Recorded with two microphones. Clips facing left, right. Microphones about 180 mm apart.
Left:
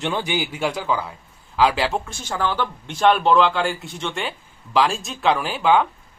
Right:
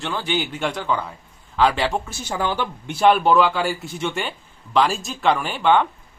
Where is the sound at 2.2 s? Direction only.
15° right (ahead or behind); by 5.8 s 5° left (ahead or behind).